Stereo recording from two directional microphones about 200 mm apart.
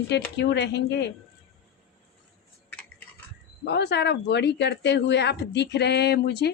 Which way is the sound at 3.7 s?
55° left (ahead or behind).